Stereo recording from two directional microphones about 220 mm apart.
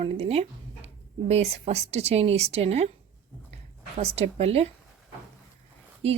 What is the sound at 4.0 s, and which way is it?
Speech, 30° right (ahead or behind).